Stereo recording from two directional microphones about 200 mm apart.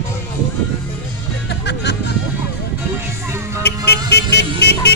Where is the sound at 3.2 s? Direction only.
15° right (ahead or behind).